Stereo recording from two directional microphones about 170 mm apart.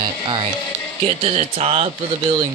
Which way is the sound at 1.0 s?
35° right (ahead or behind).